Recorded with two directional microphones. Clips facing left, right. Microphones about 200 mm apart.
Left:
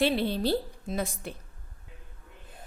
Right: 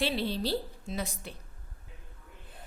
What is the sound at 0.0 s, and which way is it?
A woman's voice, 55° left (ahead or behind).